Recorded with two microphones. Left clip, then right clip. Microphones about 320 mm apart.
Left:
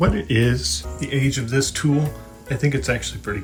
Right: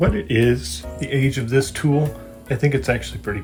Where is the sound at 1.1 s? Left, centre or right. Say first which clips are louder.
Right 2 dB; centre.